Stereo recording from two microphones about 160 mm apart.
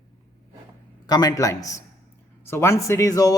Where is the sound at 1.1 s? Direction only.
25° left (ahead or behind).